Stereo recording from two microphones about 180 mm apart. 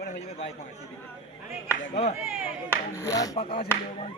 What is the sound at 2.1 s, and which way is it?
Speech, 10° right (ahead or behind).